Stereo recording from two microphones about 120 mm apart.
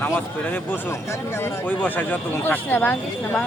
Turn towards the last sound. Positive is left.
turn(degrees=15)  # may be behind; listen again after turning